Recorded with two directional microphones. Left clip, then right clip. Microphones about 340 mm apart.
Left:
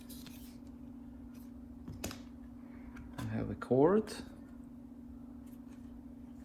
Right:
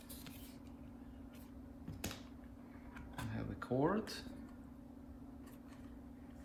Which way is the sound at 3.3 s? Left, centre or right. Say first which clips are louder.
Left 9 dB; centre.